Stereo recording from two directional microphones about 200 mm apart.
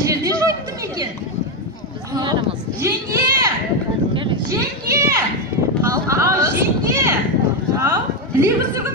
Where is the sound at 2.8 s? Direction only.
15° right (ahead or behind).